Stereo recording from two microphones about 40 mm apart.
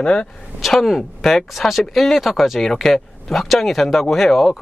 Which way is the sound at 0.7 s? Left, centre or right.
Centre.